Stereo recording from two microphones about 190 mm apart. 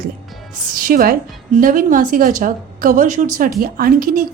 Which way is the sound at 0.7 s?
45° right (ahead or behind).